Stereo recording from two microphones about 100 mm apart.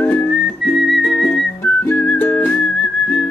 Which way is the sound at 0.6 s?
Centre (ahead or behind).